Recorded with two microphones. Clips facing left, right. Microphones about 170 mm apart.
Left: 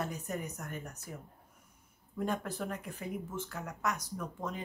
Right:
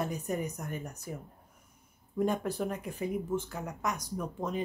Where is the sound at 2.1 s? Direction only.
15° right (ahead or behind).